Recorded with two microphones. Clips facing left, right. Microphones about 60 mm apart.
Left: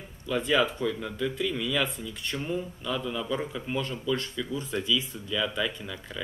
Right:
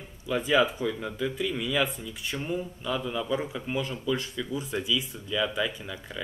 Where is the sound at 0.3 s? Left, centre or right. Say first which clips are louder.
Right 1 dB; centre.